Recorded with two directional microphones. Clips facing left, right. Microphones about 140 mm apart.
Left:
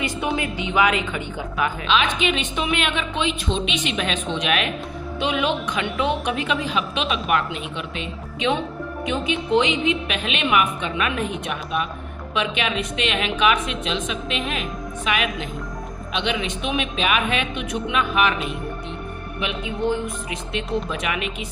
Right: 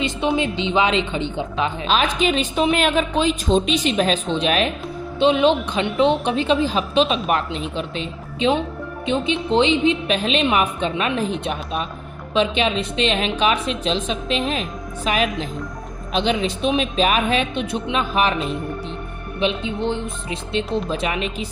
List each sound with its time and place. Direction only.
0.0 s a woman's voice: 25° right (ahead or behind)
1.9 s a woman's voice: 35° right (ahead or behind)